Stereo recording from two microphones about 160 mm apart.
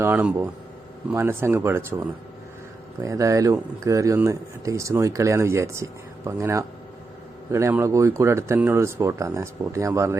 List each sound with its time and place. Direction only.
0.0 s speech: 10° right (ahead or behind)
3.0 s speech: 20° right (ahead or behind)